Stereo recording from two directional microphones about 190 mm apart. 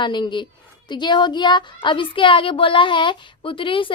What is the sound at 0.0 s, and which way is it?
A woman's voice, 25° left (ahead or behind).